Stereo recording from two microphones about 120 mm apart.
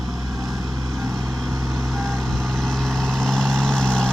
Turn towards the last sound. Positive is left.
turn(degrees=5)  # may be behind; listen again after turning